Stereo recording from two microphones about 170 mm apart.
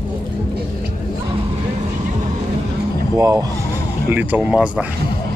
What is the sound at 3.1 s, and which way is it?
Speech, 20° right (ahead or behind).